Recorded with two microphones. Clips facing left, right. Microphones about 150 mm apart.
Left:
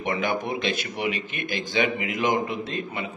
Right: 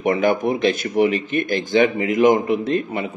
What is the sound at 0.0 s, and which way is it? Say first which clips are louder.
Speech: right 8 dB; 45° right (ahead or behind).